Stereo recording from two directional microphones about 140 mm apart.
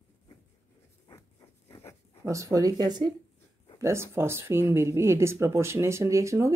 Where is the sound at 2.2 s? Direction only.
20° right (ahead or behind).